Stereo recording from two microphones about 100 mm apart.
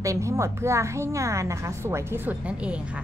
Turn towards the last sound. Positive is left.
turn(degrees=-10)  # may be behind; listen again after turning